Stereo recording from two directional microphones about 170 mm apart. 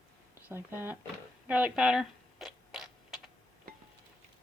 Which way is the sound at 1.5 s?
5° right (ahead or behind).